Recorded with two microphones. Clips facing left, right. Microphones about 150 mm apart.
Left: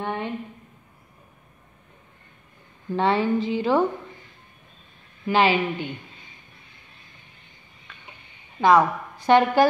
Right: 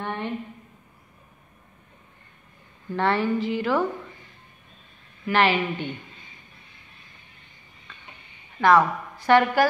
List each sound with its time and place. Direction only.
0.0 s a sound: 15° left (ahead or behind)
3.0 s a woman's voice: 15° left (ahead or behind)
5.2 s a woman's voice: 15° left (ahead or behind)
8.5 s a woman's voice: 15° left (ahead or behind)